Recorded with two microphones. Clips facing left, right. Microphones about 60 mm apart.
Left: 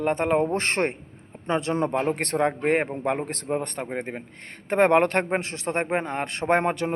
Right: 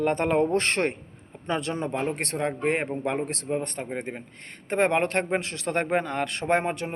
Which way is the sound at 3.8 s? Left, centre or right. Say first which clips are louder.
Left 2 dB; left.